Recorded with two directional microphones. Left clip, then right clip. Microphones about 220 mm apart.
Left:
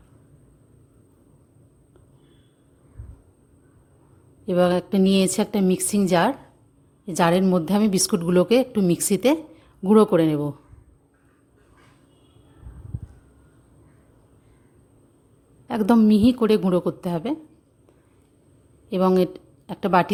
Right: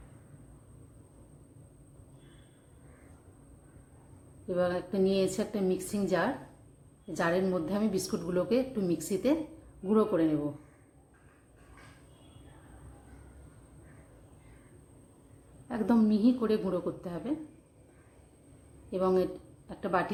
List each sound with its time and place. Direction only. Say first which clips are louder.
4.4 s a woman's voice: left 10 dB; 50° left (ahead or behind)
15.7 s a woman's voice: left 10 dB; 45° left (ahead or behind)
18.9 s a woman's voice: left 8 dB; 45° left (ahead or behind)